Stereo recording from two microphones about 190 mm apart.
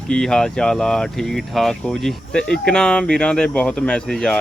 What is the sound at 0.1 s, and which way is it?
Speech, 5° left (ahead or behind).